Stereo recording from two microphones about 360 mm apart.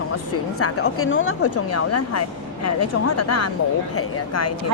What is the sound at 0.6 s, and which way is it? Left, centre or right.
Speech, left.